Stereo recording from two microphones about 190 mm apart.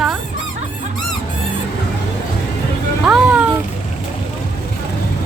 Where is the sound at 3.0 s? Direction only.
5° right (ahead or behind).